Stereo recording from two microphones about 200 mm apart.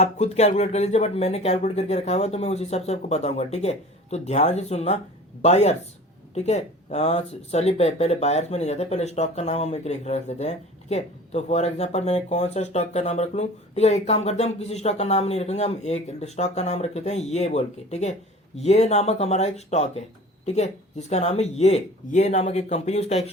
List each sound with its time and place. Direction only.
0.0 s speech: 35° left (ahead or behind)